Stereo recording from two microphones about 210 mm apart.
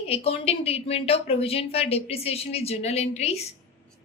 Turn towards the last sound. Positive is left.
turn(degrees=30)  # may be behind; listen again after turning